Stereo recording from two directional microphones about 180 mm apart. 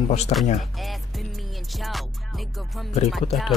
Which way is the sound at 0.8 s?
Centre (ahead or behind).